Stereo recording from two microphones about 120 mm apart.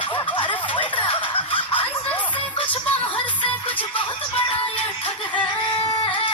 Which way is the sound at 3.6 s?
15° left (ahead or behind).